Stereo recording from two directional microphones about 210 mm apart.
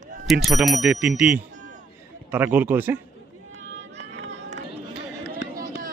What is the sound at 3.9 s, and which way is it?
Run, 55° right (ahead or behind).